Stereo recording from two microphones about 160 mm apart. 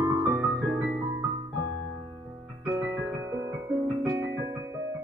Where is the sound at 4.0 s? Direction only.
20° right (ahead or behind).